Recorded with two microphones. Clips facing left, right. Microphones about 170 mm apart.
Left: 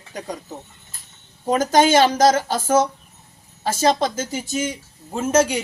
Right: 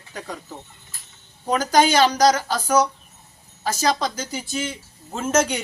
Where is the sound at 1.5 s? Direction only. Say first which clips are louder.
Left 2 dB; 25° left (ahead or behind).